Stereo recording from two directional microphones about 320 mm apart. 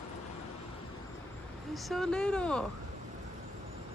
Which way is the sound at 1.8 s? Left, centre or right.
Centre.